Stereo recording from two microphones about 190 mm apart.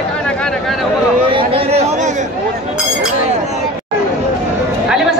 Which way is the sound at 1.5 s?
30° right (ahead or behind).